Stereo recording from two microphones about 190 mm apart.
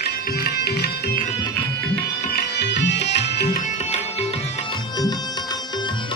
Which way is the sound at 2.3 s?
65° left (ahead or behind).